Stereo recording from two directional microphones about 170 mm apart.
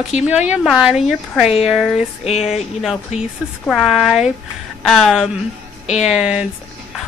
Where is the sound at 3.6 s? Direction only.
Centre (ahead or behind).